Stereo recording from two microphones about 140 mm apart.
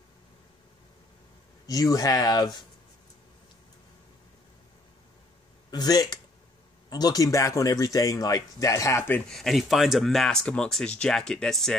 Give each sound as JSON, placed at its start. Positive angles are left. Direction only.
{"t": 1.7, "sound": "speech", "side_deg": 25}
{"t": 5.7, "sound": "speech", "side_deg": 25}
{"t": 9.3, "sound": "speech", "side_deg": 0}